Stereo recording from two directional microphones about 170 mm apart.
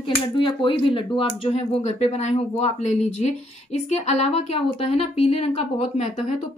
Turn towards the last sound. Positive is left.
turn(degrees=40)  # may be behind; listen again after turning